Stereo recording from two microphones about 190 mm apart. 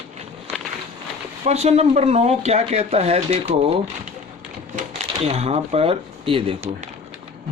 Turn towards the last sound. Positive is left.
turn(degrees=-30)  # may be behind; listen again after turning